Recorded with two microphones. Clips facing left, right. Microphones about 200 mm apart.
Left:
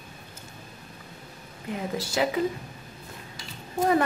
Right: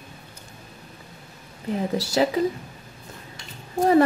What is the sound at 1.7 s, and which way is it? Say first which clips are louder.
Speech: right 5 dB; 40° right (ahead or behind).